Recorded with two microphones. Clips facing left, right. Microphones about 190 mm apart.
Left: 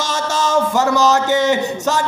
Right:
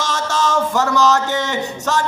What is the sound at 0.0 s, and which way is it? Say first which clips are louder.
Speech: even; 5° left (ahead or behind).